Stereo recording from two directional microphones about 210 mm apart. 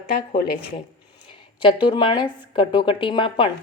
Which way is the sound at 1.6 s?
25° left (ahead or behind).